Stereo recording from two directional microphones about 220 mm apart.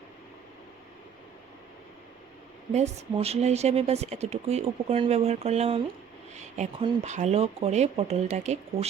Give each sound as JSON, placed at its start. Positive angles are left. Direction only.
{"t": 2.7, "sound": "speech", "side_deg": -30}